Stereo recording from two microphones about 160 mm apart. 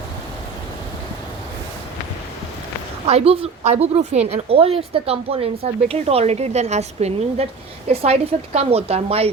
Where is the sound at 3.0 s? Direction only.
40° right (ahead or behind).